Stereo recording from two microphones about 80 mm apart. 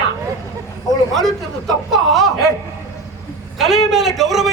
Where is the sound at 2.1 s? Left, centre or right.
Centre.